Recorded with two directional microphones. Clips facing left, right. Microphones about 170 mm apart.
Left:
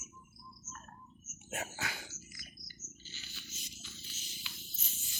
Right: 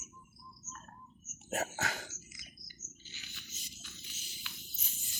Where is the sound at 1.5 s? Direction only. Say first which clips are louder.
Right 5 dB; 40° right (ahead or behind).